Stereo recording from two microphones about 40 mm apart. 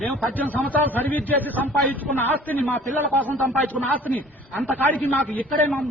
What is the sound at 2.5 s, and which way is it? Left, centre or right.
Speech, left.